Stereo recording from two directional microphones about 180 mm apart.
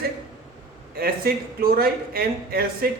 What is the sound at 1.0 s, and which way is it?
Speech, 60° right (ahead or behind).